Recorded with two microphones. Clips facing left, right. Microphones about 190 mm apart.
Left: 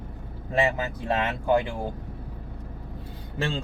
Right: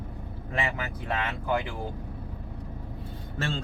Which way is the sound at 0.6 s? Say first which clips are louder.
Left 7 dB; 25° left (ahead or behind).